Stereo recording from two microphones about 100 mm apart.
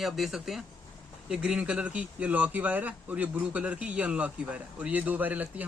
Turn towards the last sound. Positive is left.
turn(degrees=-15)  # may be behind; listen again after turning